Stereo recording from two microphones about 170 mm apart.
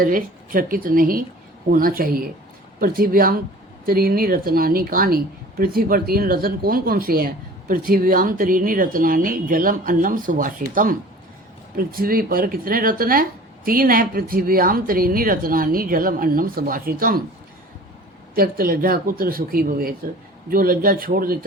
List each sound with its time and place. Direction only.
0.0 s speech: 55° right (ahead or behind)
18.3 s speech: 60° right (ahead or behind)